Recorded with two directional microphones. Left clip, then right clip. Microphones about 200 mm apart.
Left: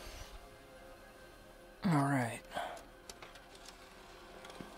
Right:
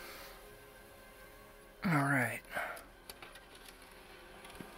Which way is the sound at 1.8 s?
5° left (ahead or behind).